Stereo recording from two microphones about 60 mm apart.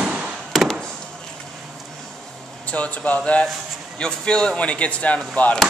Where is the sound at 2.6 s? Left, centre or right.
Left.